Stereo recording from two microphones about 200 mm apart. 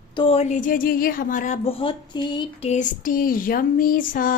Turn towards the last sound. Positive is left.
turn(degrees=45)  # may be behind; listen again after turning